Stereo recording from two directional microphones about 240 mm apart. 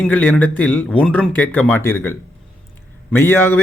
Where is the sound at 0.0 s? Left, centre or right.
Centre.